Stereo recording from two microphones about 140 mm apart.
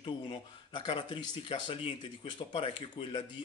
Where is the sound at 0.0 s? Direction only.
35° left (ahead or behind).